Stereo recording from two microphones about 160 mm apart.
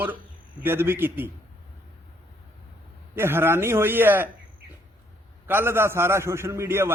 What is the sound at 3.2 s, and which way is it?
A man's voice, 15° right (ahead or behind).